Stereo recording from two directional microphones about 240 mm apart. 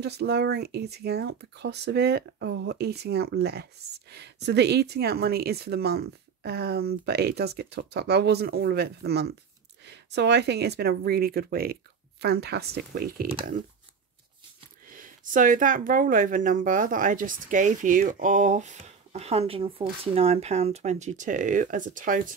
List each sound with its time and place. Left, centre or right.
0.0 s speech: right
14.9 s speech: right